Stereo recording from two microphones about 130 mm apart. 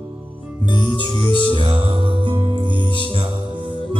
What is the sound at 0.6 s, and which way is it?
Music, 40° left (ahead or behind).